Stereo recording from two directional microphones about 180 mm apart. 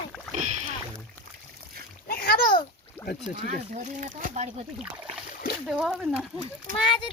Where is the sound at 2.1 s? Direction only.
55° left (ahead or behind).